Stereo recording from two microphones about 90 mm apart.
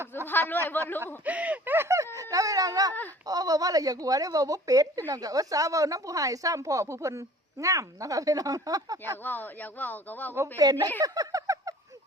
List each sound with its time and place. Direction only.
0.3 s speech: 25° left (ahead or behind)
1.0 s speech: 15° right (ahead or behind); by 9.1 s 40° right (ahead or behind)
9.2 s speech: 20° left (ahead or behind)
10.6 s speech: 45° right (ahead or behind)